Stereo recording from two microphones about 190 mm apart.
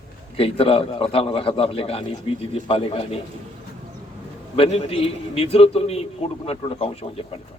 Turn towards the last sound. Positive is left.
turn(degrees=30)  # may be behind; listen again after turning